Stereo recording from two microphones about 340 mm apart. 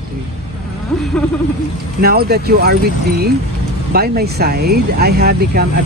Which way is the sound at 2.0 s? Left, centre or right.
Right.